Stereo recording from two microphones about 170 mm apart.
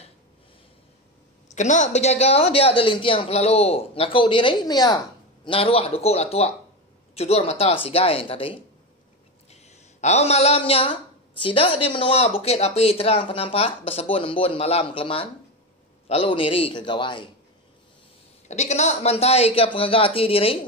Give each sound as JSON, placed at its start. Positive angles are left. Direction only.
{"t": 1.5, "sound": "a woman's voice", "side_deg": 45}
{"t": 9.5, "sound": "a sound", "side_deg": 40}
{"t": 11.4, "sound": "a woman's voice", "side_deg": 30}
{"t": 18.5, "sound": "a woman's voice", "side_deg": 40}